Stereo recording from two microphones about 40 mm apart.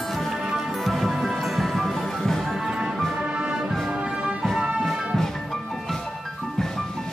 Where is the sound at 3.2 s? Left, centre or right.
Right.